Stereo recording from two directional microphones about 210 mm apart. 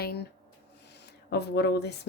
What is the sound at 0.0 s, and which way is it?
Speech, 50° left (ahead or behind).